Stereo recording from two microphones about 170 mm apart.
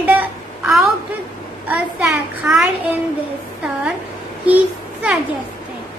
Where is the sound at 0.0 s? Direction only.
10° right (ahead or behind).